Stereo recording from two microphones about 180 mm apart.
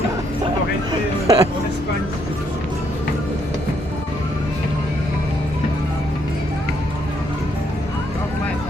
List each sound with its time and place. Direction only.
0.9 s vehicle: 20° right (ahead or behind)